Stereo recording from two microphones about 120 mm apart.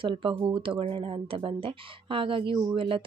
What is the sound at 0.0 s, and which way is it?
Speech, 45° right (ahead or behind).